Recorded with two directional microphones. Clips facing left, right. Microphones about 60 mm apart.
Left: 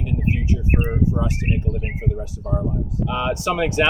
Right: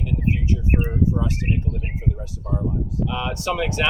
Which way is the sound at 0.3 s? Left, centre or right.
Left.